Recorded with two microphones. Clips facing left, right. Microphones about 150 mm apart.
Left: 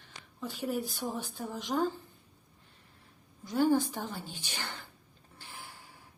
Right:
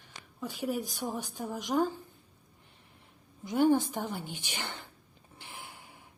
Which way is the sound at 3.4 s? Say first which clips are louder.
Right 2 dB; 20° right (ahead or behind).